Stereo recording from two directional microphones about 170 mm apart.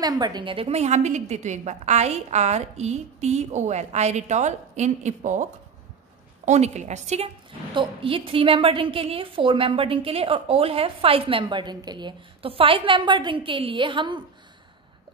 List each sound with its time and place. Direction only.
0.0 s a woman's voice: 25° right (ahead or behind); by 7.2 s 45° right (ahead or behind)
7.7 s a woman's voice: 30° right (ahead or behind)